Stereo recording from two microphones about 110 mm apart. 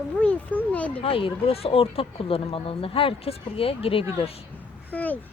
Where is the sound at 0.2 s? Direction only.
10° left (ahead or behind).